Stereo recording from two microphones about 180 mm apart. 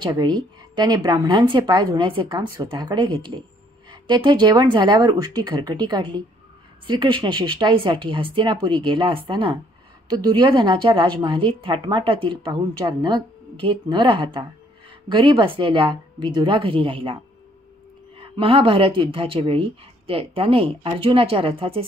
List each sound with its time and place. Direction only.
0.7 s a woman's voice: 20° right (ahead or behind)